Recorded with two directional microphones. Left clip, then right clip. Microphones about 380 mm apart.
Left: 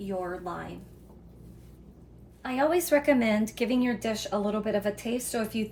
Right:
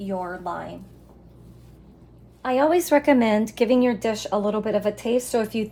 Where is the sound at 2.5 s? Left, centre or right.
Right.